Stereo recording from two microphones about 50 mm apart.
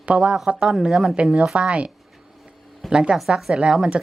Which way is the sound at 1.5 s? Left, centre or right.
Right.